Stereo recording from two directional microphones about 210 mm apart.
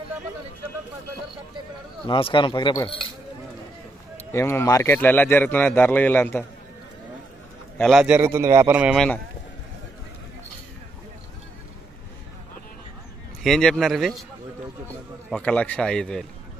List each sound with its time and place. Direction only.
2.0 s speech: 25° left (ahead or behind)
4.3 s a man's voice: 10° left (ahead or behind)
7.7 s a man's voice: centre (ahead or behind)
13.4 s a man's voice: centre (ahead or behind)
15.4 s a man's voice: 5° left (ahead or behind)